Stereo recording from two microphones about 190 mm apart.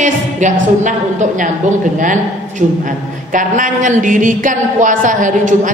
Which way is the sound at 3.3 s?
45° right (ahead or behind).